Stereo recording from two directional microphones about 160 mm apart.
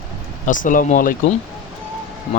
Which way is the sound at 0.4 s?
55° left (ahead or behind).